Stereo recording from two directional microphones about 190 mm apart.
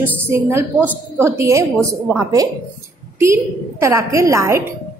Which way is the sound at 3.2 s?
15° right (ahead or behind).